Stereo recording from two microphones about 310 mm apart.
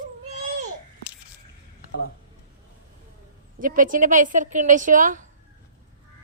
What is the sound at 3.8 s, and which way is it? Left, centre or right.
A woman's voice, right.